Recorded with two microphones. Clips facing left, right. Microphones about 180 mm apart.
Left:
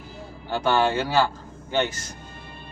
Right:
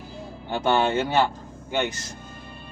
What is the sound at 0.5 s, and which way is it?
Speech, 20° right (ahead or behind).